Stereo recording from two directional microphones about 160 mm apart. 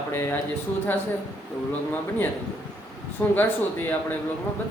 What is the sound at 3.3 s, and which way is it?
Speech, 10° left (ahead or behind).